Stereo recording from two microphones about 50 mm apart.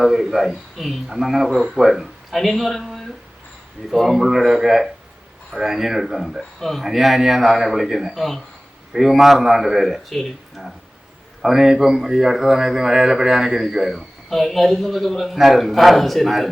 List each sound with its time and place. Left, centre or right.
0.0 s speech: centre
11.4 s speech: centre